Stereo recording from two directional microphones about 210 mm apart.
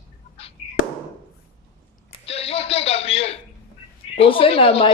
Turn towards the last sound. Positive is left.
turn(degrees=25)  # may be behind; listen again after turning